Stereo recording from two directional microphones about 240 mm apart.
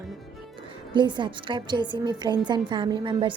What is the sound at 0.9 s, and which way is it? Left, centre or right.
A woman's voice, centre.